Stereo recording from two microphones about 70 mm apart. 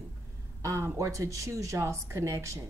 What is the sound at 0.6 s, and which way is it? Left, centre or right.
Speech, right.